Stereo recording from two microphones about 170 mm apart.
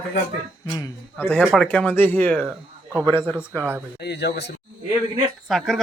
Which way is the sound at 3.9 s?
75° left (ahead or behind).